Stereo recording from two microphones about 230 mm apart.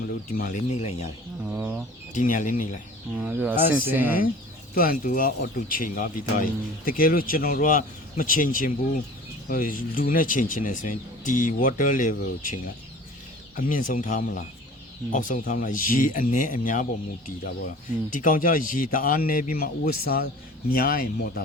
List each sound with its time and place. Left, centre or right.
0.3 s speech: left
1.5 s speech: centre
2.1 s speech: left
3.2 s speech: centre
4.7 s speech: left